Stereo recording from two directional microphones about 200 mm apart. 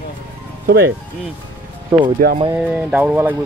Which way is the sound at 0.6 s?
50° right (ahead or behind).